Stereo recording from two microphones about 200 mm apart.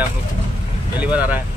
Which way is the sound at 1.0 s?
5° right (ahead or behind).